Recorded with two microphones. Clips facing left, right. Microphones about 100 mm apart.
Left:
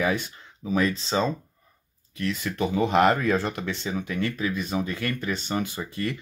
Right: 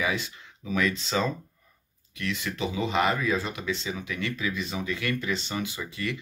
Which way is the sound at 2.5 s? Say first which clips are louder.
Left 6 dB; 55° left (ahead or behind).